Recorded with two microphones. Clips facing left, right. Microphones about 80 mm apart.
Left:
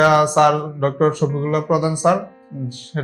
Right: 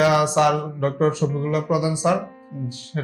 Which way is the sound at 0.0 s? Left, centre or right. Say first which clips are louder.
Left 4 dB; left.